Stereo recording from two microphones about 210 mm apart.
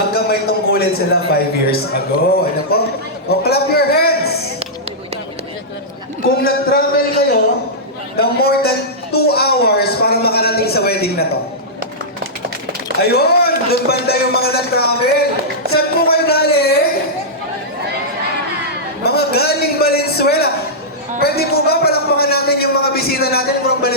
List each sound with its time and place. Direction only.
0.1 s a man's voice: 45° left (ahead or behind)
3.2 s speech: 50° left (ahead or behind)
6.4 s speech: 45° left (ahead or behind)
13.0 s speech: 50° left (ahead or behind)
19.0 s a man's voice: 50° left (ahead or behind)